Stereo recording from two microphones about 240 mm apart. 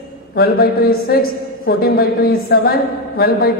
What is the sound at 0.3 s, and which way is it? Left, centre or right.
A woman's voice, left.